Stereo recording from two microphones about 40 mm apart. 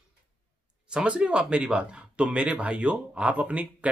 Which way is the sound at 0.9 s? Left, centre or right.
Right.